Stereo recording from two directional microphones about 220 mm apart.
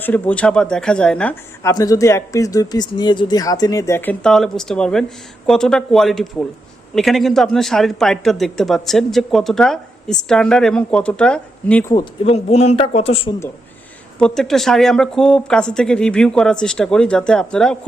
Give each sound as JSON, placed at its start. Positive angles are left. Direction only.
{"t": 0.0, "sound": "speech", "side_deg": 5}
{"t": 11.9, "sound": "a man's voice", "side_deg": 20}
{"t": 14.2, "sound": "speech", "side_deg": 5}